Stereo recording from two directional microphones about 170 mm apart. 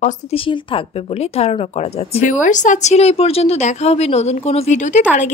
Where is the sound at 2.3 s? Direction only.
50° left (ahead or behind).